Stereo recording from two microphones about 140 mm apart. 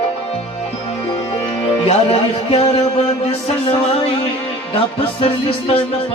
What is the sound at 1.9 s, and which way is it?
Music, 45° left (ahead or behind).